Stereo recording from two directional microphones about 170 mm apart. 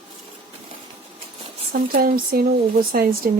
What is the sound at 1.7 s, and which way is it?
Speech, 60° right (ahead or behind).